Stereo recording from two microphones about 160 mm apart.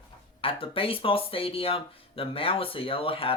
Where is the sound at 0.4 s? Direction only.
35° left (ahead or behind).